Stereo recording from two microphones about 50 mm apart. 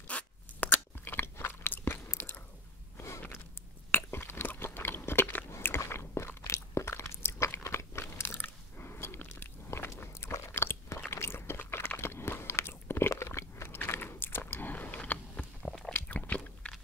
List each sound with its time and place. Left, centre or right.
0.1 s a sound: left
1.0 s crunch: left
3.0 s a sound: left
3.9 s chewing: left
5.8 s crunch: left
9.7 s a sound: left
10.3 s biting: left
13.1 s biting: left
13.7 s chewing: left
14.5 s biting: left
15.6 s biting: left
16.1 s a sound: left